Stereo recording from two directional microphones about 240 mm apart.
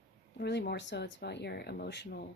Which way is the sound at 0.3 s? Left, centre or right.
Left.